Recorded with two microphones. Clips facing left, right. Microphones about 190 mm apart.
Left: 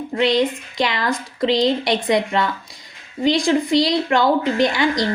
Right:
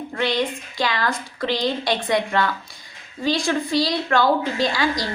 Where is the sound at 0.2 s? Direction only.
20° left (ahead or behind).